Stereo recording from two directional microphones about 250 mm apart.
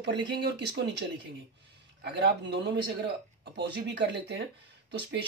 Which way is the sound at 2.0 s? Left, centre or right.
Right.